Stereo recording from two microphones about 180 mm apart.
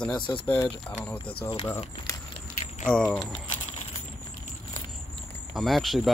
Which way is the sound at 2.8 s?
5° left (ahead or behind).